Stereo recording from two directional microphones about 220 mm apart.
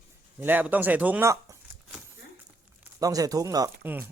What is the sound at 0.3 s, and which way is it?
Speech, 10° right (ahead or behind).